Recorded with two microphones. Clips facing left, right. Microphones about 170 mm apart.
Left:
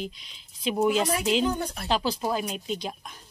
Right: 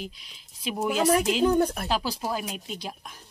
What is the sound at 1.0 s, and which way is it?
Speech, 50° right (ahead or behind).